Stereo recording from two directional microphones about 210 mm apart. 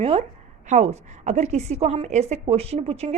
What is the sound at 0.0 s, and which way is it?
A woman's voice, 25° right (ahead or behind).